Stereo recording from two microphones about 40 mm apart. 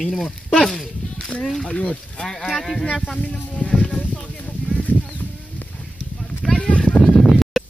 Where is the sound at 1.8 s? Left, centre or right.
Left.